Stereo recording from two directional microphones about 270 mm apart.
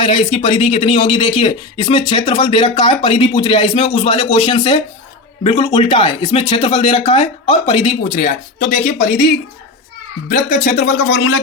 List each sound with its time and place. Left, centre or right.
0.0 s speech: centre
10.2 s speech: left
10.8 s speech: left